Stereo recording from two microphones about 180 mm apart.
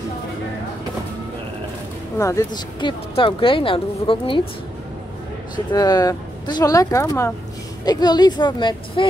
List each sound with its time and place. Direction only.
2.1 s speech: 15° left (ahead or behind)
5.7 s speech: 20° left (ahead or behind)